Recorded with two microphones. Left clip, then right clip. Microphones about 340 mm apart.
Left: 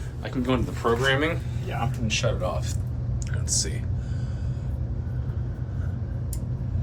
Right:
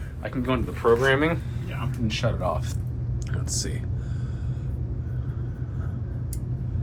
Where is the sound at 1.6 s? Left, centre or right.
Left.